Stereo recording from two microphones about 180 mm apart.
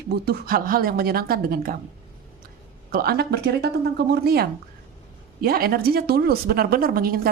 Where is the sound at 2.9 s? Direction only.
60° right (ahead or behind).